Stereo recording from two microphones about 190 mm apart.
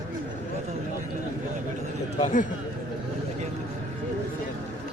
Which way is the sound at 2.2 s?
40° left (ahead or behind).